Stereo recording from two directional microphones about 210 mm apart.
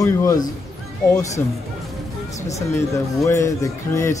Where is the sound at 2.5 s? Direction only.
15° left (ahead or behind).